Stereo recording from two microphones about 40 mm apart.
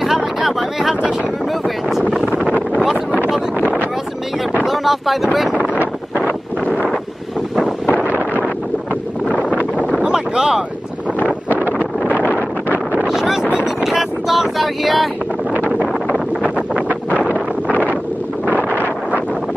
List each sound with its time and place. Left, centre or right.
0.0 s a sound: centre
4.6 s speech: centre
7.5 s wind noise: centre
10.0 s wind noise: centre
12.4 s wind noise: right
13.0 s boat: centre
13.8 s wind noise: centre
15.8 s a sound: right
18.7 s wind noise: left